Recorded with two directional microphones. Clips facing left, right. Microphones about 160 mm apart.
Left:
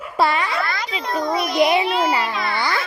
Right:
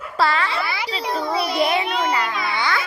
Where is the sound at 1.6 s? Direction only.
20° left (ahead or behind).